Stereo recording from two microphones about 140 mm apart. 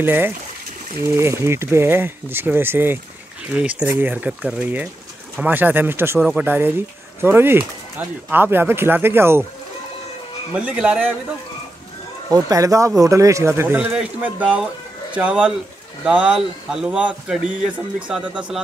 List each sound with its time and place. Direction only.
0.0 s speech: 15° right (ahead or behind)
10.5 s speech: 5° right (ahead or behind)
12.3 s speech: 25° right (ahead or behind); by 18.4 s 10° right (ahead or behind)